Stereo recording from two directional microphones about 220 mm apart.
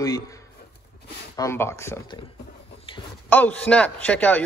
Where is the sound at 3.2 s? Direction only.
10° left (ahead or behind).